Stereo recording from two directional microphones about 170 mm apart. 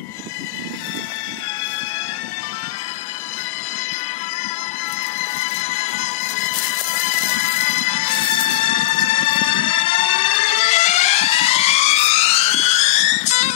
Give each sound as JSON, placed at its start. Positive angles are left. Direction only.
{"t": 5.2, "sound": "music", "side_deg": 40}